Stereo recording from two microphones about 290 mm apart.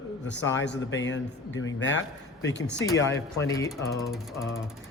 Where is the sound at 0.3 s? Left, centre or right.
Left.